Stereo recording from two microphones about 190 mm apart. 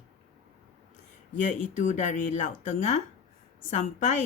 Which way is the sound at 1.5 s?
40° left (ahead or behind).